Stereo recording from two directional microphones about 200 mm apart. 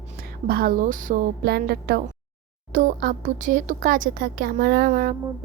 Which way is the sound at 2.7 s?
40° right (ahead or behind).